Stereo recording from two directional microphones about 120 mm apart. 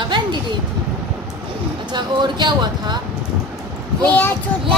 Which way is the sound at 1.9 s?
40° right (ahead or behind).